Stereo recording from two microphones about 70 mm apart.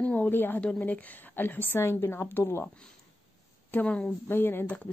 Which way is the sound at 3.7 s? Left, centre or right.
Centre.